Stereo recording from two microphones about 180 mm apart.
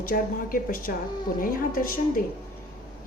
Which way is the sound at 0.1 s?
50° left (ahead or behind).